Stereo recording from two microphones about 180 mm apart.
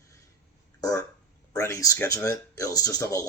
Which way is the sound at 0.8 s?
20° left (ahead or behind).